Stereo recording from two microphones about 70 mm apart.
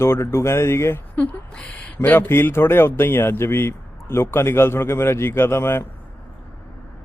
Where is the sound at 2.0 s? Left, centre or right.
Left.